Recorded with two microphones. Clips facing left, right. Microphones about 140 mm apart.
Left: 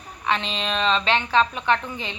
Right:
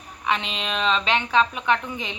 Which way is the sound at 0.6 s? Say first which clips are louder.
Left 1 dB; 5° right (ahead or behind).